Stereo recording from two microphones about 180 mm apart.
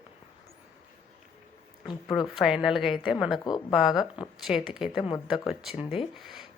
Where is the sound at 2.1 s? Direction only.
Centre (ahead or behind).